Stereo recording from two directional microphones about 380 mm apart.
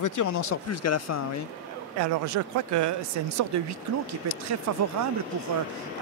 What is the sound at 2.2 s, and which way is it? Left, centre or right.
Speech, right.